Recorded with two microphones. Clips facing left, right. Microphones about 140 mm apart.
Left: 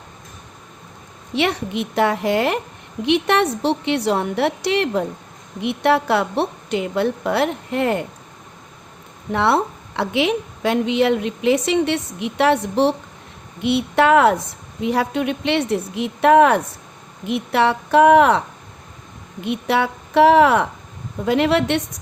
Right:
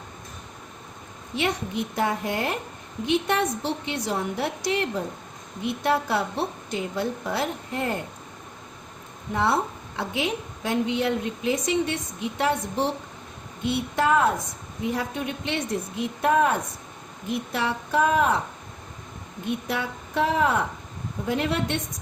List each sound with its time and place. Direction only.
1.3 s a woman's voice: 75° left (ahead or behind)
9.3 s a woman's voice: 75° left (ahead or behind)
19.5 s a woman's voice: 75° left (ahead or behind)